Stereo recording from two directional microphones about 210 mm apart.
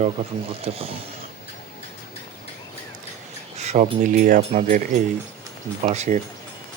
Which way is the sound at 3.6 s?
35° right (ahead or behind).